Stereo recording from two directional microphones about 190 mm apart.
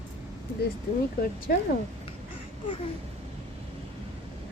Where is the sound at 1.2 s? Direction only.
45° left (ahead or behind).